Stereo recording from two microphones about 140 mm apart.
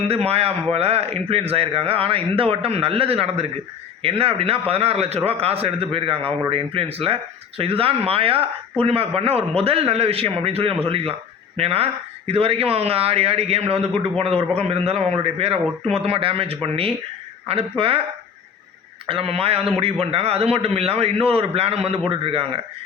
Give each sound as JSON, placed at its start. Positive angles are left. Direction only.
{"t": 0.1, "sound": "a man's voice", "side_deg": -45}
{"t": 19.0, "sound": "a man's voice", "side_deg": -40}